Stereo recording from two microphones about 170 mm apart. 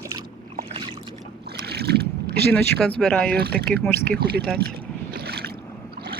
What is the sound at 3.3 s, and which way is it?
Speech, 70° right (ahead or behind).